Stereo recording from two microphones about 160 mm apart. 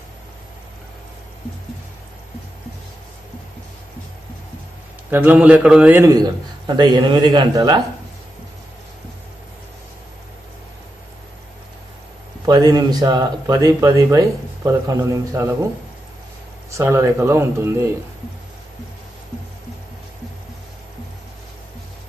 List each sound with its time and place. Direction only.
5.1 s speech: 10° right (ahead or behind); by 7.8 s 30° right (ahead or behind)
12.4 s speech: 25° right (ahead or behind)
16.7 s speech: 20° right (ahead or behind)